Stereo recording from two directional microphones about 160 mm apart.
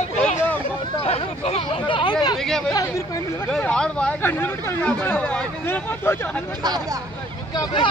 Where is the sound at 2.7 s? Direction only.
20° left (ahead or behind).